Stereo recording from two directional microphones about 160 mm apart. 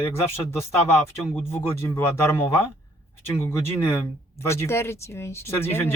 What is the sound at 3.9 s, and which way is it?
Speech, 15° left (ahead or behind).